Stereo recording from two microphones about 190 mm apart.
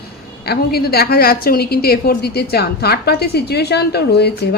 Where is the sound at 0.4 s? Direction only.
55° left (ahead or behind).